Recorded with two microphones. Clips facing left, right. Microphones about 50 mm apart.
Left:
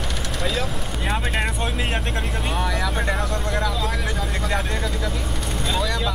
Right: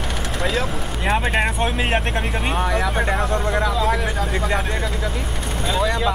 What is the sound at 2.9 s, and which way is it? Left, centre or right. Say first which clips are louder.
Speech: right 4 dB; centre.